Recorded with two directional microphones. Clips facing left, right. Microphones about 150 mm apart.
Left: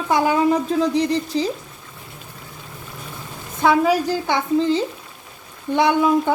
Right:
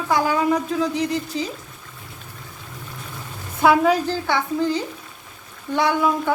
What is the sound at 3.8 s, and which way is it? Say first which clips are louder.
Speech: left 1 dB; 5° left (ahead or behind).